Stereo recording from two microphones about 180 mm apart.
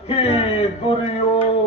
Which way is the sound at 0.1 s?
35° left (ahead or behind).